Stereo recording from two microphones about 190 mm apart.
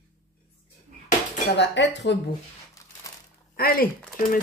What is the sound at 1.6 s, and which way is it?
Speech, 65° left (ahead or behind).